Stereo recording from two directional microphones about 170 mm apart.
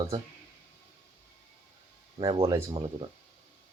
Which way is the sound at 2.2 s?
30° right (ahead or behind).